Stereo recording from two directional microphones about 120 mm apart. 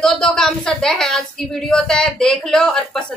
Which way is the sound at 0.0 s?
5° left (ahead or behind).